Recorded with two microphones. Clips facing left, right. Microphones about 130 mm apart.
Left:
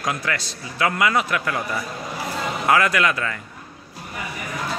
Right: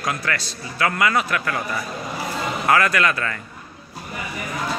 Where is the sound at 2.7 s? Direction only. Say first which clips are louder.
Even; 15° left (ahead or behind).